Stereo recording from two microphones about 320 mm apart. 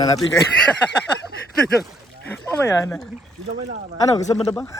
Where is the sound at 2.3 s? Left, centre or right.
Centre.